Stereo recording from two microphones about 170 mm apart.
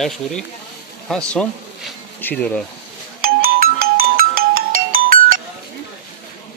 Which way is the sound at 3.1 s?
60° right (ahead or behind).